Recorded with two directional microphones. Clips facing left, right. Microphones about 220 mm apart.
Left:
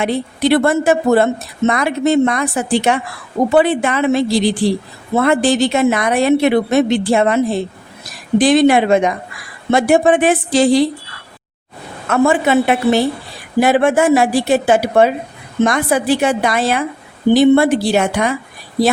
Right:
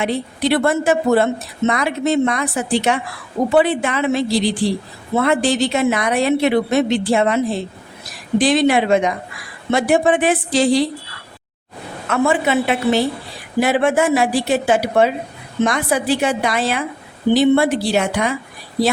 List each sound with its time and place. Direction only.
0.0 s speech: 50° left (ahead or behind)
8.4 s speech: 50° left (ahead or behind)
12.0 s speech: 45° left (ahead or behind)